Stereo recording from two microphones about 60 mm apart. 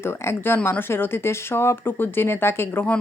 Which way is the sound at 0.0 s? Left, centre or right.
Left.